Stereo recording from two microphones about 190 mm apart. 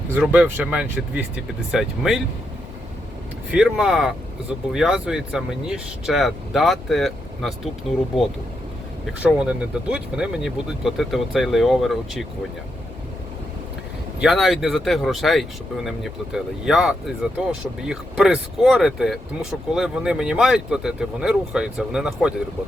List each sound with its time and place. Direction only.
0.1 s speech: 10° right (ahead or behind)
3.5 s speech: 5° right (ahead or behind)
9.2 s speech: 5° right (ahead or behind)
14.2 s speech: centre (ahead or behind)